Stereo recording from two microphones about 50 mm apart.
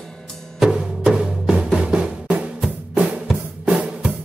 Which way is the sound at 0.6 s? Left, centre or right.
Centre.